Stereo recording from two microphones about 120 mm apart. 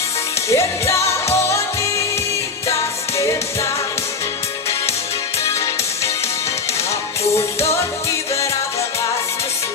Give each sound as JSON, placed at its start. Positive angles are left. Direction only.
{"t": 0.4, "sound": "music", "side_deg": 25}
{"t": 3.2, "sound": "music", "side_deg": 25}